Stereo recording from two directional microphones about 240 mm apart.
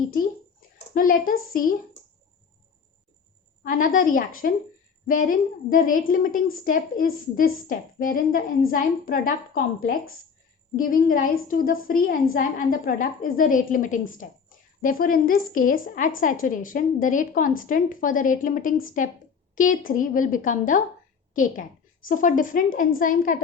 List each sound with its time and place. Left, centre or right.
0.9 s a woman's voice: left
3.6 s a woman's voice: left
10.8 s a woman's voice: left